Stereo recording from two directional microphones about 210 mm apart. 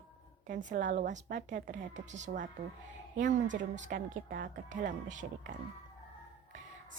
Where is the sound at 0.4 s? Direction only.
35° right (ahead or behind).